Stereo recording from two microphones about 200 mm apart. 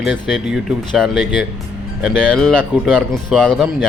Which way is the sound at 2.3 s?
5° left (ahead or behind).